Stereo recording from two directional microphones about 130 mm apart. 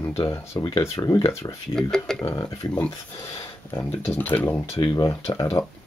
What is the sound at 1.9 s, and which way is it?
Speech, 5° left (ahead or behind).